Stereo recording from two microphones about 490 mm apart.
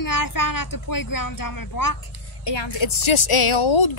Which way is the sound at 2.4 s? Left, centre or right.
Left.